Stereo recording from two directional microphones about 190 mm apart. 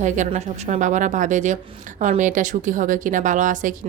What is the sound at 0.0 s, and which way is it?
A woman's voice, 40° right (ahead or behind).